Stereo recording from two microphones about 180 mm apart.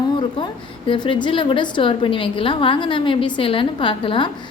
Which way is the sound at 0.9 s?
25° left (ahead or behind).